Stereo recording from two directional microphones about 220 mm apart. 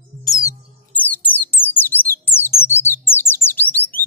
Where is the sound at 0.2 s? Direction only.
15° left (ahead or behind).